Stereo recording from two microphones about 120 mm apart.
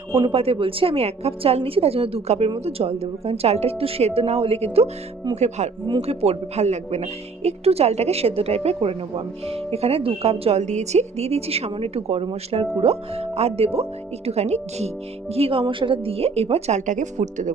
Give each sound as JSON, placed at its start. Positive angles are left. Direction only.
{"t": 0.2, "sound": "speech", "side_deg": -50}
{"t": 5.3, "sound": "speech", "side_deg": -70}
{"t": 6.0, "sound": "speech", "side_deg": -60}
{"t": 15.3, "sound": "speech", "side_deg": -55}